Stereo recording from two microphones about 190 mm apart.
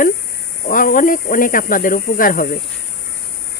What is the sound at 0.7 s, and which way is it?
Speech, 45° left (ahead or behind).